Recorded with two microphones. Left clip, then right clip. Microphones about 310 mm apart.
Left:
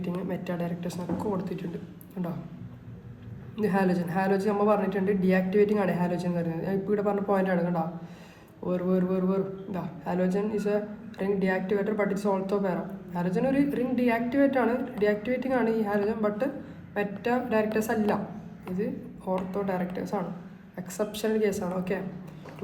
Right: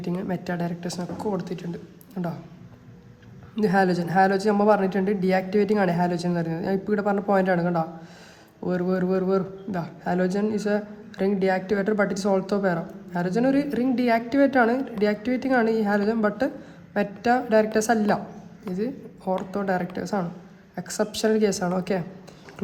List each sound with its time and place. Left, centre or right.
0.0 s a man's voice: right
3.5 s a man's voice: right